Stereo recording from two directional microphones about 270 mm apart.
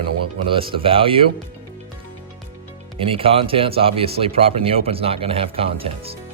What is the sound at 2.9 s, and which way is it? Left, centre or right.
Speech, centre.